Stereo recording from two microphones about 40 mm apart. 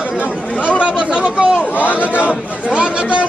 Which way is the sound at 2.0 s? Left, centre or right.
Right.